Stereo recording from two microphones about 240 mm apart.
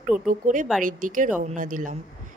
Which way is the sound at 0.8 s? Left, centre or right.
Right.